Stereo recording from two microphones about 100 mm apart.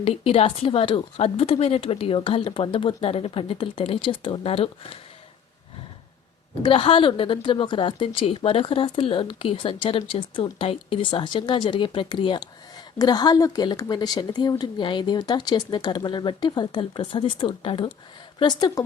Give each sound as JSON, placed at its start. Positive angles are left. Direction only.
{"t": 0.0, "sound": "a woman's voice", "side_deg": 80}
{"t": 6.6, "sound": "a woman's voice", "side_deg": 60}
{"t": 13.0, "sound": "speech", "side_deg": 40}
{"t": 18.4, "sound": "speech", "side_deg": 40}